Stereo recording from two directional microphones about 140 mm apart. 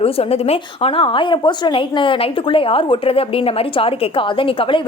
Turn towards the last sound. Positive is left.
turn(degrees=40)  # may be behind; listen again after turning